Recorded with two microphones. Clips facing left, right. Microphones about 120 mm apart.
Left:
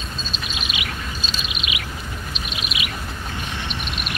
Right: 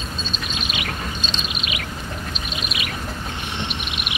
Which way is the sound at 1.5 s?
40° right (ahead or behind).